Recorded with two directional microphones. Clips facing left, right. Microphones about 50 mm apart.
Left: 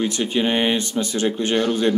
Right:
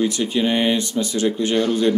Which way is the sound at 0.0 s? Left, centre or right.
Left.